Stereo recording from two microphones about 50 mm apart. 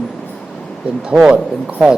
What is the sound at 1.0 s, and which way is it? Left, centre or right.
Speech, centre.